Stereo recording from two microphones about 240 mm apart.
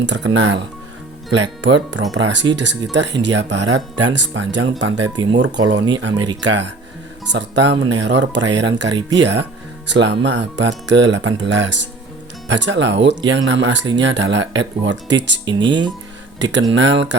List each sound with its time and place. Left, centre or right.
0.0 s speech: right
5.0 s speech: centre
5.3 s speech: right
15.4 s speech: centre
16.4 s speech: right